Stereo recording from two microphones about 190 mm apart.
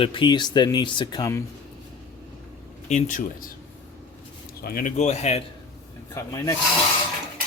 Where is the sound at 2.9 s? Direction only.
40° left (ahead or behind).